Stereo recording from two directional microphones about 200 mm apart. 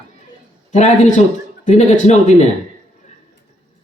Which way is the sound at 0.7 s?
35° left (ahead or behind).